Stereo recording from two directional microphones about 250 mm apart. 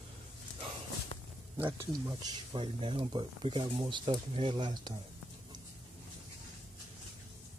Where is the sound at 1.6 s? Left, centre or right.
Centre.